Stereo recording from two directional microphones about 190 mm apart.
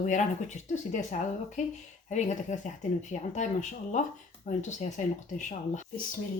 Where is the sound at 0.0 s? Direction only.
40° left (ahead or behind).